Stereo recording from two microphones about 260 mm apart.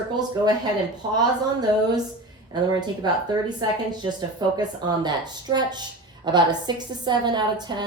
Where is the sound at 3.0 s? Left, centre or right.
Centre.